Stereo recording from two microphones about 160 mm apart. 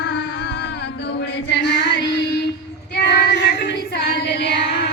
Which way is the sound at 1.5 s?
90° left.